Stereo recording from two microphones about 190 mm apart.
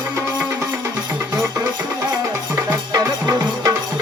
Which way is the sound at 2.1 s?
20° right (ahead or behind).